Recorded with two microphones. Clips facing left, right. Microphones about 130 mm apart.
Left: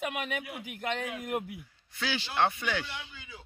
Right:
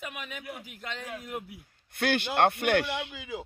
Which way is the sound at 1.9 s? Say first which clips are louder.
Right 6 dB; 55° right (ahead or behind).